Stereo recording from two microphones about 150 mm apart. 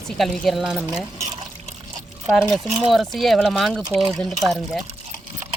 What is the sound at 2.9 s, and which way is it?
Speech, centre (ahead or behind).